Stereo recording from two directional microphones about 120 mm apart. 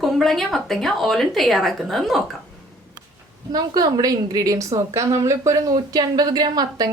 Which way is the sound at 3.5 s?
35° right (ahead or behind).